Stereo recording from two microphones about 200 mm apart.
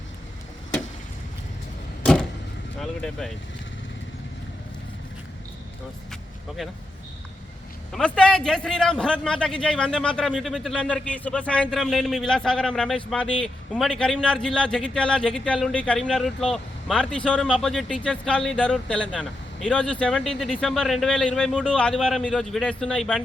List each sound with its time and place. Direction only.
2.8 s a man's voice: centre (ahead or behind)
7.9 s a man's voice: 5° left (ahead or behind)